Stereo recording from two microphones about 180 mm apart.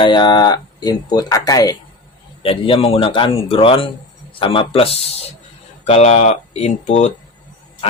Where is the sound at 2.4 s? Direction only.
30° left (ahead or behind).